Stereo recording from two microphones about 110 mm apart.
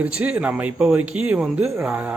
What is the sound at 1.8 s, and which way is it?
Speech, 20° right (ahead or behind).